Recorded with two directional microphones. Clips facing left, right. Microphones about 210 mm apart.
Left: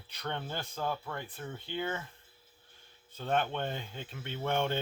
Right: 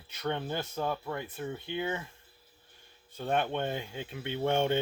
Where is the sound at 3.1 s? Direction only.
15° right (ahead or behind).